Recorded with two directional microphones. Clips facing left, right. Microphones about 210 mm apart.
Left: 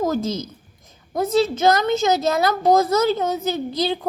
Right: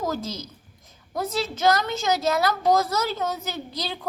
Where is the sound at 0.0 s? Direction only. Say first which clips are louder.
Left 7 dB; 25° left (ahead or behind).